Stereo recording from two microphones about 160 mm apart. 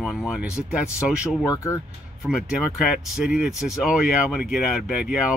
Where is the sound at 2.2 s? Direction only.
5° right (ahead or behind).